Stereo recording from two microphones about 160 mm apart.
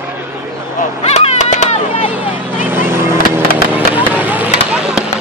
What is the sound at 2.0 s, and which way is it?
Vehicle, 10° right (ahead or behind).